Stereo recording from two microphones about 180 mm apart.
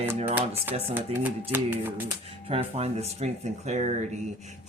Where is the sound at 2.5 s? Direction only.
35° right (ahead or behind).